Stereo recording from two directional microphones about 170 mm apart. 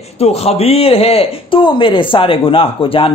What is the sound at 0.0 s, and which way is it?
Speech, 35° left (ahead or behind).